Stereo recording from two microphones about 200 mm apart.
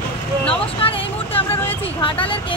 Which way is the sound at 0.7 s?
30° left (ahead or behind).